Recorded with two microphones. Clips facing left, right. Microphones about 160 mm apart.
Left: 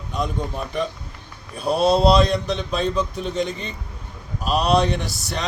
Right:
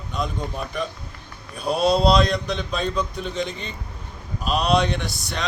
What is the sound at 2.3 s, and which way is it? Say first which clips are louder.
Speech: left 2 dB; 30° left (ahead or behind).